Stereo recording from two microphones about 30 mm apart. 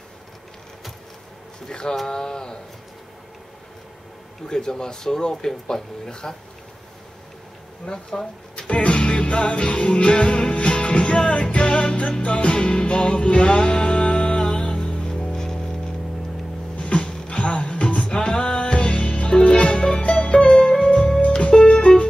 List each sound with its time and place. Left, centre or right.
1.7 s speech: left
4.5 s speech: left
7.8 s speech: left
8.6 s music: left; by 15.8 s centre
16.7 s music: left
18.1 s music: left
20.6 s music: centre
21.5 s music: left